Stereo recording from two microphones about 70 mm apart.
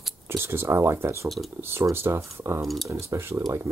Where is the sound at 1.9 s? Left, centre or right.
Right.